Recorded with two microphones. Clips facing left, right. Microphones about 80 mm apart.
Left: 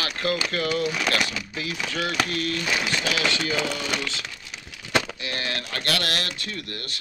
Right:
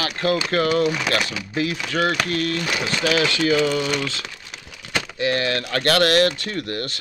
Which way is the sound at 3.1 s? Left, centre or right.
Right.